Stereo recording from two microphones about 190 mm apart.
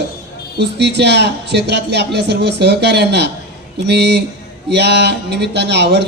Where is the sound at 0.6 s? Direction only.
65° right (ahead or behind).